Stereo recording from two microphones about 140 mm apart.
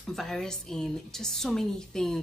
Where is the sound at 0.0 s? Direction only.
Centre (ahead or behind).